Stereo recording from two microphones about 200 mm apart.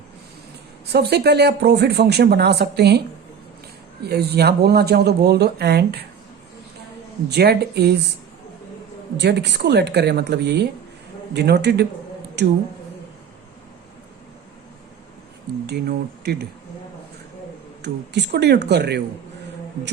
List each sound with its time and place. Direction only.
0.9 s speech: 55° right (ahead or behind)
4.0 s speech: 55° right (ahead or behind)
7.3 s speech: 55° right (ahead or behind)
9.1 s speech: 60° right (ahead or behind)
15.6 s speech: 55° right (ahead or behind)
17.8 s speech: 55° right (ahead or behind)